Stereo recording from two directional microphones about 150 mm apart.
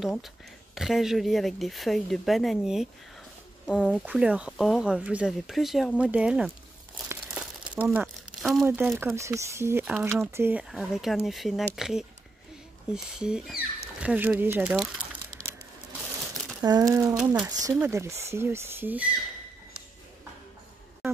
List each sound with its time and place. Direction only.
0.0 s speech: centre (ahead or behind)
7.3 s crumpling: 10° right (ahead or behind)
8.6 s speech: 15° right (ahead or behind)
10.6 s speech: centre (ahead or behind)
16.6 s speech: 25° right (ahead or behind)